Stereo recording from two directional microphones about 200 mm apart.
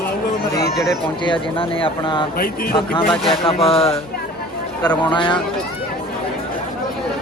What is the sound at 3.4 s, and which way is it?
Speech, 30° left (ahead or behind).